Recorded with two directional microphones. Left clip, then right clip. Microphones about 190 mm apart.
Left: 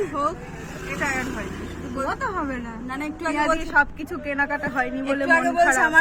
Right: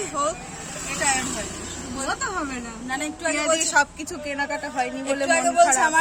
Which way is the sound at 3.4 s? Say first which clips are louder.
Even; 10° right (ahead or behind).